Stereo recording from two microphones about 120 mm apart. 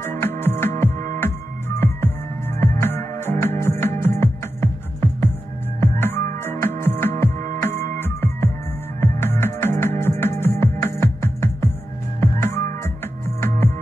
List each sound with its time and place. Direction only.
0.0 s music: 20° left (ahead or behind)